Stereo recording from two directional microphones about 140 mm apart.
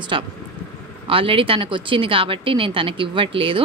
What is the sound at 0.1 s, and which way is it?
A woman's voice, 40° right (ahead or behind).